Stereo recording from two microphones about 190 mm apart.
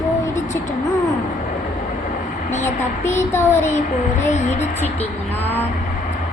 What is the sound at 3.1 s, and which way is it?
Speech, 15° left (ahead or behind).